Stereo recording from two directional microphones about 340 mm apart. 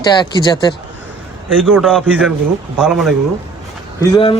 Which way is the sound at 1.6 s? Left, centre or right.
Centre.